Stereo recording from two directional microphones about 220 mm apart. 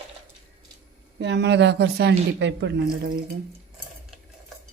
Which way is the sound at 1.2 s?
50° right (ahead or behind).